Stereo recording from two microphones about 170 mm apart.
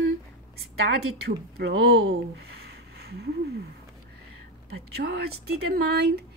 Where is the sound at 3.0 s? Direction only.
75° right (ahead or behind).